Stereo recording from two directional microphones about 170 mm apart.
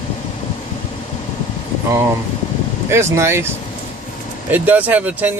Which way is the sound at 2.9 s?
15° right (ahead or behind).